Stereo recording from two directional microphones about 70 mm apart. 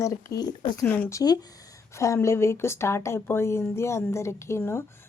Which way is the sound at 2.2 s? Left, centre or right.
Left.